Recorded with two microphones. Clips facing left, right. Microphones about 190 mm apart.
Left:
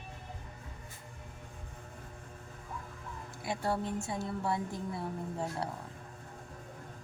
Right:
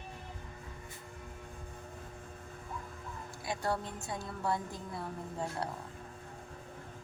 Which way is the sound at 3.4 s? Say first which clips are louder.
Left 2 dB; 25° left (ahead or behind).